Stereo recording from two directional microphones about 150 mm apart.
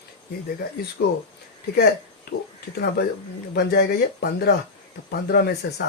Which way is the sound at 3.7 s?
90° left.